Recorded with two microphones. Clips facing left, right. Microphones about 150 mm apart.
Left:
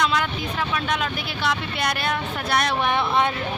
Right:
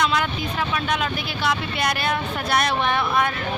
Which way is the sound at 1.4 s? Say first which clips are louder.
Right 1 dB; 5° right (ahead or behind).